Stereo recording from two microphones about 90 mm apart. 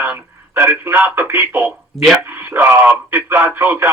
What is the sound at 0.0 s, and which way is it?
Speech, 20° right (ahead or behind).